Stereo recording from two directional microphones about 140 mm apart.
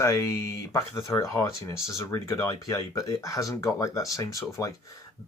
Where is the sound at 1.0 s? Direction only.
20° left (ahead or behind).